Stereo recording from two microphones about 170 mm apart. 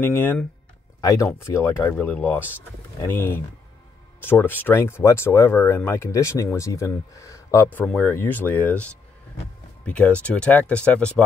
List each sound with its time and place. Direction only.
0.0 s speech: 15° left (ahead or behind)